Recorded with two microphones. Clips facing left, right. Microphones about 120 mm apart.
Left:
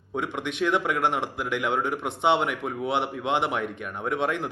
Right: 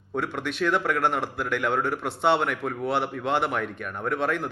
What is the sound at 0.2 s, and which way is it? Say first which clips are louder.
A man's voice: even; 20° left (ahead or behind).